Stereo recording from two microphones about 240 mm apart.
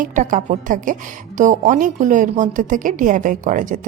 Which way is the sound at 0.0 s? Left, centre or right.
Right.